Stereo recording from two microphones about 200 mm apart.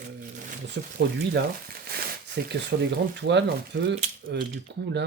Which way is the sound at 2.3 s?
55° right (ahead or behind).